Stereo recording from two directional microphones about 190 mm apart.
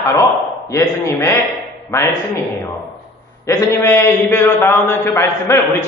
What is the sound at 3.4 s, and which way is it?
A man's voice, 15° left (ahead or behind).